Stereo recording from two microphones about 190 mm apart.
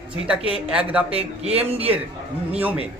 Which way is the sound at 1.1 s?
30° right (ahead or behind).